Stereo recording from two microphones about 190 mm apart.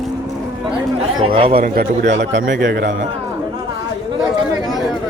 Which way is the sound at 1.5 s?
50° right (ahead or behind).